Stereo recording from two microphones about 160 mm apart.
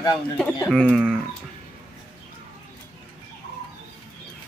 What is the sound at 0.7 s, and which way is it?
Speech, centre (ahead or behind).